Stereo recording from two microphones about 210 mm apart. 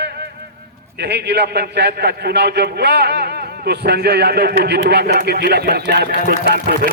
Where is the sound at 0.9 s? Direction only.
55° right (ahead or behind).